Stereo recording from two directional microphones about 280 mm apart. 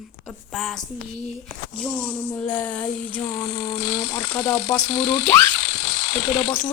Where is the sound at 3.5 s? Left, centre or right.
Left.